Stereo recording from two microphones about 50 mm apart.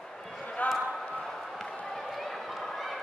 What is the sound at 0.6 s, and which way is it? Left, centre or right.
Basketball bounce, left.